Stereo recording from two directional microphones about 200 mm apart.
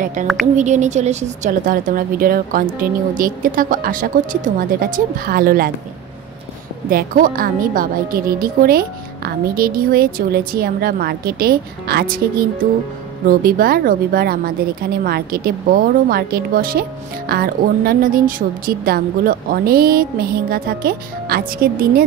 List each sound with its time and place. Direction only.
0.0 s a woman's voice: 40° right (ahead or behind)
6.9 s a woman's voice: 45° right (ahead or behind)